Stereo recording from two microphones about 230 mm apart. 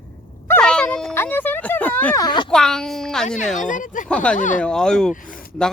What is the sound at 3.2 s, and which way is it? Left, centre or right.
Speech, left.